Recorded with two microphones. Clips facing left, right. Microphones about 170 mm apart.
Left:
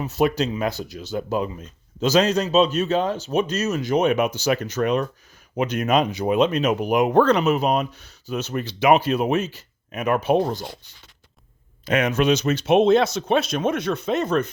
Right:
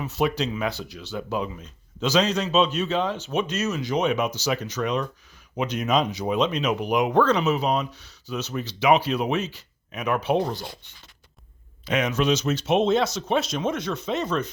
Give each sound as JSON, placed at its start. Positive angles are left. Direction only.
{"t": 0.0, "sound": "speech", "side_deg": 45}
{"t": 11.9, "sound": "speech", "side_deg": 55}